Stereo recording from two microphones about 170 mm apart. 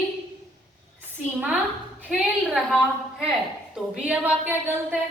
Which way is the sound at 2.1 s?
5° right (ahead or behind).